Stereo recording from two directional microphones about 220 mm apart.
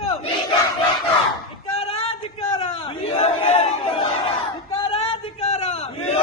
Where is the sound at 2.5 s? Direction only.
25° left (ahead or behind).